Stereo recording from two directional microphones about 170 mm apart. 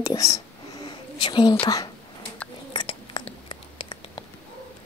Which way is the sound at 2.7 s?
30° left (ahead or behind).